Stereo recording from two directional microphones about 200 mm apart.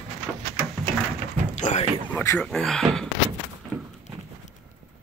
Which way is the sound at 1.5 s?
35° left (ahead or behind).